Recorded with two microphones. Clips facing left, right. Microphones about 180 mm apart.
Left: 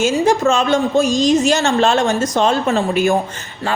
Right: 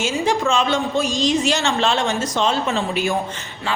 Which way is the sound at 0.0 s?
45° left (ahead or behind).